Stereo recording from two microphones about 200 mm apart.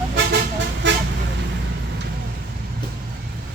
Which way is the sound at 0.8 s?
65° right (ahead or behind).